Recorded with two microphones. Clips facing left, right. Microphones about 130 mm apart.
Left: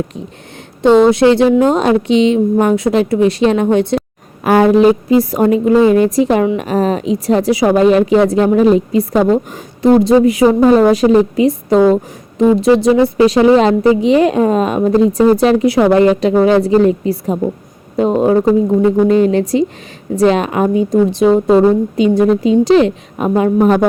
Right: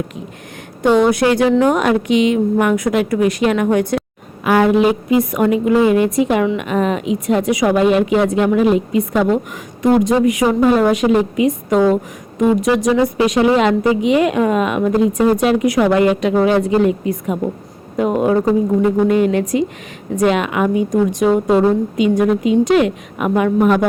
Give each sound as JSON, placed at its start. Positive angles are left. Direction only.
{"t": 0.8, "sound": "a woman's voice", "side_deg": 25}
{"t": 4.4, "sound": "speech", "side_deg": 35}